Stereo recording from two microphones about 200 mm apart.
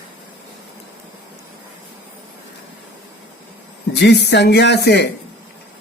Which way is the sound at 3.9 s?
60° left (ahead or behind).